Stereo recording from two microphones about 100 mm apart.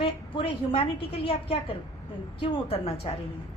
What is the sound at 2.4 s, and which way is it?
Speech, 90° left.